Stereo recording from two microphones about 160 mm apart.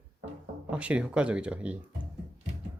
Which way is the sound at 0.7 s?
5° right (ahead or behind).